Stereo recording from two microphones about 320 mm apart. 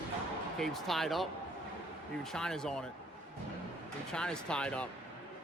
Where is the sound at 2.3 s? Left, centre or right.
Centre.